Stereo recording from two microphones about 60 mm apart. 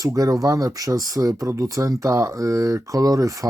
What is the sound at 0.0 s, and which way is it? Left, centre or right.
Speech, right.